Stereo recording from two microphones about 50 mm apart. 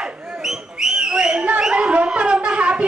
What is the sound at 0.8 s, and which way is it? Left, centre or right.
Whistle, centre.